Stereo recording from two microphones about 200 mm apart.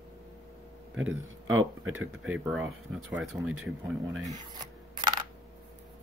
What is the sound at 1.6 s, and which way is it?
Speech, 90° right.